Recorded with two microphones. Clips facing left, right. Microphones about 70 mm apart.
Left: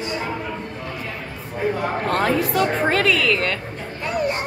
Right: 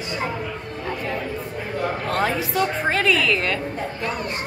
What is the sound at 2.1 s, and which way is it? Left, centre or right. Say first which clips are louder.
A woman's voice: left 5 dB; centre.